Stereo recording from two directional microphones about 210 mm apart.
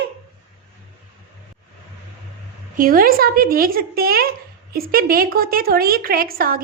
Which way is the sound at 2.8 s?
45° right (ahead or behind).